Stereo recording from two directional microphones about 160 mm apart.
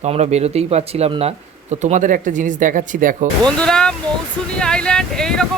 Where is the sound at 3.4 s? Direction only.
5° left (ahead or behind).